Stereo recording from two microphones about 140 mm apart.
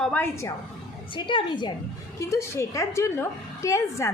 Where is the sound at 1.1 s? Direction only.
35° left (ahead or behind).